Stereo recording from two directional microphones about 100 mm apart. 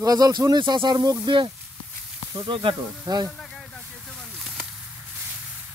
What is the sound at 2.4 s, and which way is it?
Speech, 55° right (ahead or behind).